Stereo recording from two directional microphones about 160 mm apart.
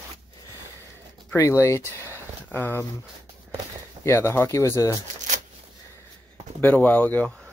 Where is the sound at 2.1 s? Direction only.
15° left (ahead or behind).